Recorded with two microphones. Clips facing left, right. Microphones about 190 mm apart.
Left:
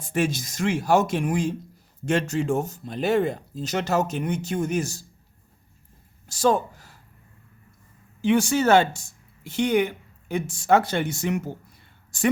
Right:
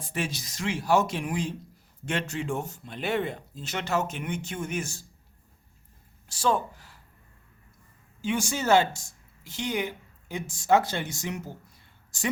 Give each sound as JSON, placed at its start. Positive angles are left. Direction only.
{"t": 0.1, "sound": "speech", "side_deg": 50}
{"t": 6.2, "sound": "speech", "side_deg": 40}
{"t": 8.2, "sound": "speech", "side_deg": 65}